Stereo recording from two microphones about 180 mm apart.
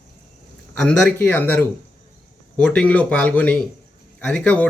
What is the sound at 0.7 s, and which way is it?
Speech, 5° left (ahead or behind).